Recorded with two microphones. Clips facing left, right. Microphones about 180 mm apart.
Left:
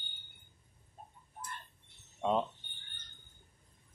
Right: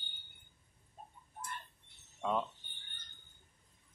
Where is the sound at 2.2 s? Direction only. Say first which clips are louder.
Left 4 dB; 25° left (ahead or behind).